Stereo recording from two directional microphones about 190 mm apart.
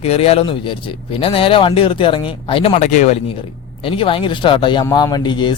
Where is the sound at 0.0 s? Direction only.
30° left (ahead or behind).